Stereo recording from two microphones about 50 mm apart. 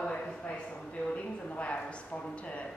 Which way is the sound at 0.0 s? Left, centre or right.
Left.